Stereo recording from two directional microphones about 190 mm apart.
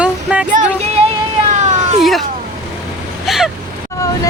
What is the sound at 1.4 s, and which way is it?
Cat, 40° right (ahead or behind).